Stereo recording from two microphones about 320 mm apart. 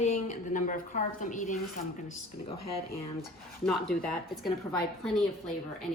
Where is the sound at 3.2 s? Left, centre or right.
Centre.